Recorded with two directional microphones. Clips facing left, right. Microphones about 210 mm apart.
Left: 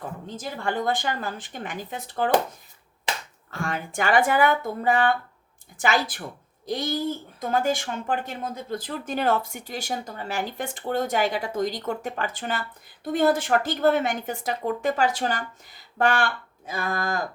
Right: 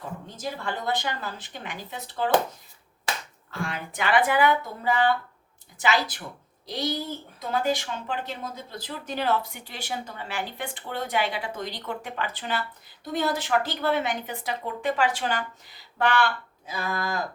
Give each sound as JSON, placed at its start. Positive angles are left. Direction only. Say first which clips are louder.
{"t": 0.6, "sound": "speech", "louder": "left 5 dB", "side_deg": 50}
{"t": 3.5, "sound": "speech", "louder": "left 3 dB", "side_deg": 45}